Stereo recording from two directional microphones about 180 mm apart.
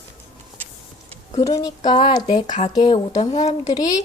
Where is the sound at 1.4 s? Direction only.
20° left (ahead or behind).